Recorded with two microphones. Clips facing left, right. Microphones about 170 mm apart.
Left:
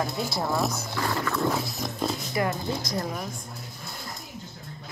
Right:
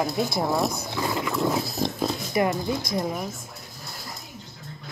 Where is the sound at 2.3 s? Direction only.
15° right (ahead or behind).